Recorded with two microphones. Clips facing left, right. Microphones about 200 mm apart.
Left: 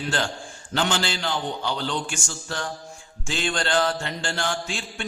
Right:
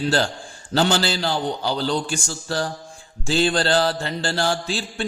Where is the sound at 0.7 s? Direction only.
35° right (ahead or behind).